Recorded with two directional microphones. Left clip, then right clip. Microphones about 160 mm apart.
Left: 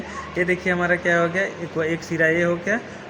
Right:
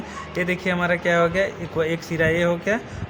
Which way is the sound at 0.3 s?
70° right (ahead or behind).